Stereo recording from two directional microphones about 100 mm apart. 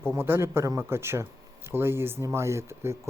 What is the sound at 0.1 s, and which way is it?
Speech, 25° right (ahead or behind).